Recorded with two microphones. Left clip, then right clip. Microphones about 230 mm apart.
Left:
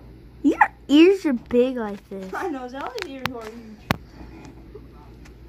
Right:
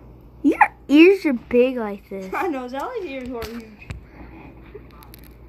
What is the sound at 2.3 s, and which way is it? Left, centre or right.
Speech, right.